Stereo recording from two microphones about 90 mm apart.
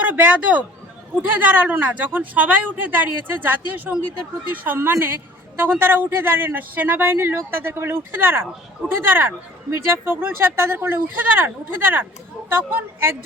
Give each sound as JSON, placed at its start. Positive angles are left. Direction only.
{"t": 0.0, "sound": "speech", "side_deg": -20}
{"t": 4.6, "sound": "a woman's voice", "side_deg": -25}